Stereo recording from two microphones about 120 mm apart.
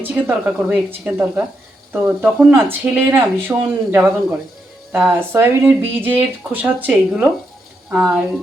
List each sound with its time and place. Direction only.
0.0 s speech: 15° right (ahead or behind)